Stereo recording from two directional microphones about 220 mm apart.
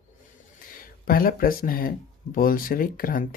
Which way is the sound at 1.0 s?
40° left (ahead or behind).